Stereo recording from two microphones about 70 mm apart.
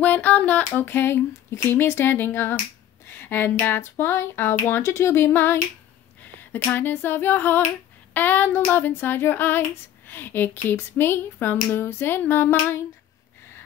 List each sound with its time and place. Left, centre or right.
0.0 s child singing: left
6.7 s a sound: left
8.1 s child singing: left